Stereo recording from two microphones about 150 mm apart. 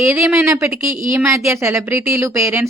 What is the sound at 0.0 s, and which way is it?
A woman's voice, 15° right (ahead or behind).